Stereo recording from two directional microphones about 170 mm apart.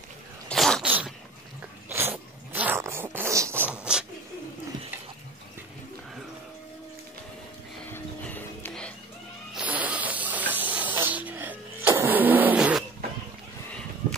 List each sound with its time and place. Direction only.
0.5 s sneeze: 5° left (ahead or behind)
0.8 s dog: 10° right (ahead or behind)
7.9 s music: 10° left (ahead or behind)
9.6 s hiss: 10° right (ahead or behind)
11.9 s vehicle: 10° right (ahead or behind)
14.0 s a sound: 40° right (ahead or behind)